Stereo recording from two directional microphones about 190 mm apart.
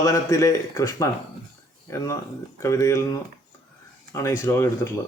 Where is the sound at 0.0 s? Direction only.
15° left (ahead or behind).